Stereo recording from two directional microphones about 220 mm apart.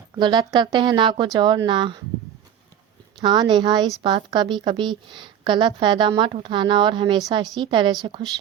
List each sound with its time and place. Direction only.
0.2 s a woman's voice: 20° right (ahead or behind)
3.2 s a woman's voice: 20° right (ahead or behind)